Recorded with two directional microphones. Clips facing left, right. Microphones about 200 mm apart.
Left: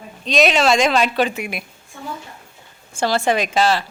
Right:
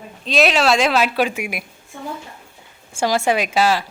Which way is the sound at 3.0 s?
10° right (ahead or behind).